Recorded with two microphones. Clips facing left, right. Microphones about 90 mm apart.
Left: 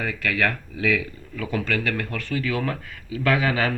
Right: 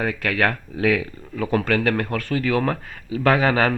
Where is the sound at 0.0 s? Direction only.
45° right (ahead or behind).